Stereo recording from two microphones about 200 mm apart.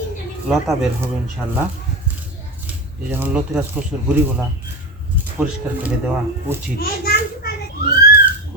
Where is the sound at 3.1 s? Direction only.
10° right (ahead or behind).